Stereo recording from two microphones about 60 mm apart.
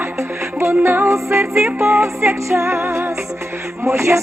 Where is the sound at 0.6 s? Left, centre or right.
Right.